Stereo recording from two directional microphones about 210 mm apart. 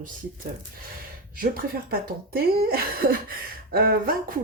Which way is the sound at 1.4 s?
45° right (ahead or behind).